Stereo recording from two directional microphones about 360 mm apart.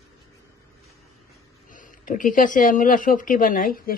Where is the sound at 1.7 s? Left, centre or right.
Left.